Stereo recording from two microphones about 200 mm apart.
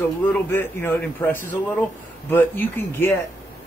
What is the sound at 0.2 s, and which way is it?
Speech, 10° left (ahead or behind).